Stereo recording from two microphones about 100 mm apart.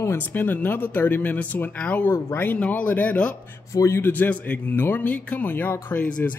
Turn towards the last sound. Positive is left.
turn(degrees=15)  # may be behind; listen again after turning